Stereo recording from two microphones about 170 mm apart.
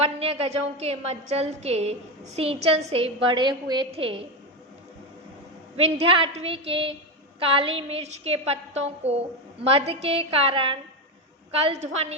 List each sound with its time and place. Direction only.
0.0 s a woman's voice: 35° right (ahead or behind)
5.7 s a woman's voice: 35° right (ahead or behind)